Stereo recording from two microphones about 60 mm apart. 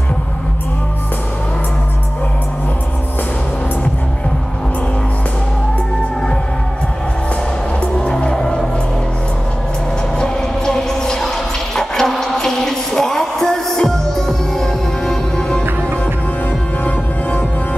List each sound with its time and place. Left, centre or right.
7.8 s music: centre
10.1 s music: centre
16.8 s music: left